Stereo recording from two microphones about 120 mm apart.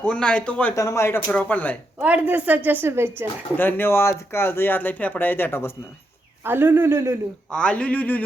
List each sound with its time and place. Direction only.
0.0 s speech: 10° left (ahead or behind)
0.8 s speech: 25° left (ahead or behind)
2.0 s a man's voice: 10° right (ahead or behind)
3.6 s speech: 15° left (ahead or behind)
6.4 s a man's voice: 15° right (ahead or behind)
7.5 s speech: 10° left (ahead or behind)